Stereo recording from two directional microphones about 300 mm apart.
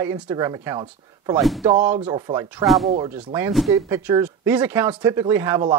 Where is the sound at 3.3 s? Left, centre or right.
Centre.